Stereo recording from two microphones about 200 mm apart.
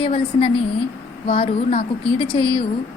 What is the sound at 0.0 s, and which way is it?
A woman's voice, 30° left (ahead or behind).